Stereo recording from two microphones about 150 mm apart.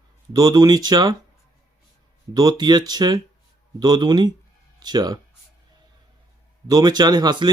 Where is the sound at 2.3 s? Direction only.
25° right (ahead or behind).